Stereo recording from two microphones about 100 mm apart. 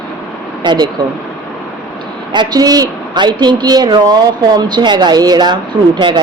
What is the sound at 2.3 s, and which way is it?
Speech, 40° right (ahead or behind).